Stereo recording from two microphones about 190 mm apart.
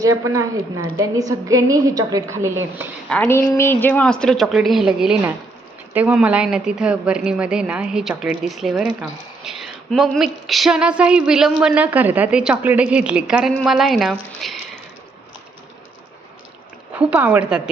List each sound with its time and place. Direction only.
0.0 s a woman's voice: 15° right (ahead or behind)
3.1 s a woman's voice: 10° left (ahead or behind)
16.9 s a woman's voice: 10° right (ahead or behind)